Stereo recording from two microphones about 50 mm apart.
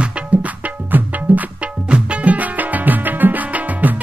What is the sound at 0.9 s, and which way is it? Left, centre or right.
Music, right.